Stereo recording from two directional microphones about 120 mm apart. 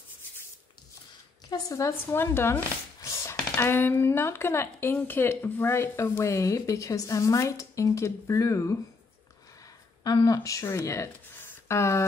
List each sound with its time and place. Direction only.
1.5 s speech: 25° left (ahead or behind)
10.0 s speech: 30° left (ahead or behind)